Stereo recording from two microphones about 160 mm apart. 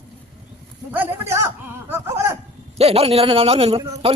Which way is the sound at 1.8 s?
15° right (ahead or behind).